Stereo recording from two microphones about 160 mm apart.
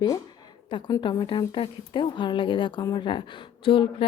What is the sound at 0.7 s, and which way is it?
A woman's voice, 30° left (ahead or behind).